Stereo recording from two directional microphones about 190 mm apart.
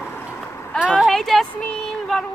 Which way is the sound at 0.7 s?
5° right (ahead or behind).